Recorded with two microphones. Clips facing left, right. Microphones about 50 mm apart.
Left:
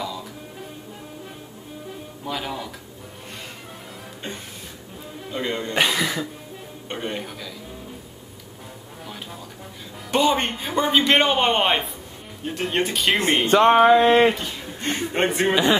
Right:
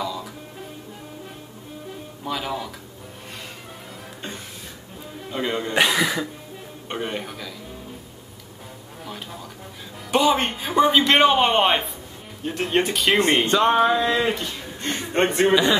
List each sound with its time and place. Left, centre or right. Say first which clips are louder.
0.0 s music: right 2 dB; centre
1.9 s music: right 1 dB; centre
5.2 s a sound: right 1 dB; centre
6.9 s a man's voice: right 1 dB; centre
10.1 s a man's voice: right 1 dB; centre